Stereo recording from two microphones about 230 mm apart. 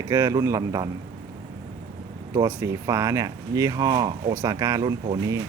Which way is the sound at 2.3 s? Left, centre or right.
Centre.